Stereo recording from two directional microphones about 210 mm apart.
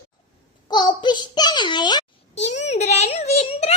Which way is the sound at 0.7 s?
20° left (ahead or behind).